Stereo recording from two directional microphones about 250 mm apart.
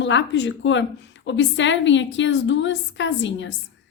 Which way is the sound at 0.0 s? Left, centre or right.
Left.